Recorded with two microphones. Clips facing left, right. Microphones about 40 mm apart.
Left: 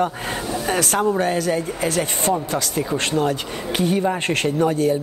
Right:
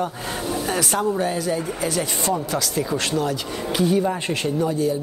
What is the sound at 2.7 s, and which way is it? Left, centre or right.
Speech, centre.